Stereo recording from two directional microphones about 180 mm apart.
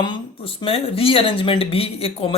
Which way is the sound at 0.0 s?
30° left (ahead or behind).